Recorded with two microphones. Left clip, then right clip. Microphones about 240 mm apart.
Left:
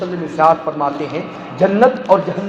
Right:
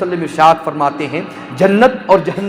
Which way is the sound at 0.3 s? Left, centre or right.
Right.